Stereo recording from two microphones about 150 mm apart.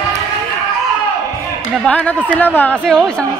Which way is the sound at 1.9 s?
10° left (ahead or behind).